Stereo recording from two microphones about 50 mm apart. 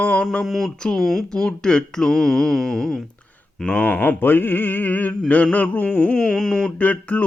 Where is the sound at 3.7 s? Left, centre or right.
Left.